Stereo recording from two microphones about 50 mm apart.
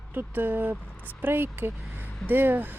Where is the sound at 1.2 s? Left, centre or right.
Right.